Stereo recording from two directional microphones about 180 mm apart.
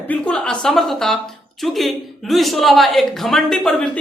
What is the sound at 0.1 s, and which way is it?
A man's voice, 5° left (ahead or behind).